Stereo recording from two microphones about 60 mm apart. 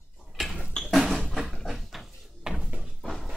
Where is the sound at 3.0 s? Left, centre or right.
Centre.